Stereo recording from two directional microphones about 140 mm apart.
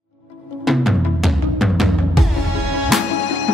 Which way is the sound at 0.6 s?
Centre (ahead or behind).